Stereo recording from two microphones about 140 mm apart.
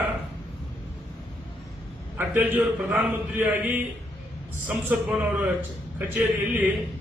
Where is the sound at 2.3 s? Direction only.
10° right (ahead or behind).